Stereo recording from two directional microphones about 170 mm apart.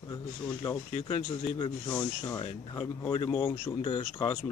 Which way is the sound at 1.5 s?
25° left (ahead or behind).